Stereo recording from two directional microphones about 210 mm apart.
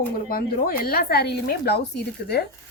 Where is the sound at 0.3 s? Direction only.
45° left (ahead or behind).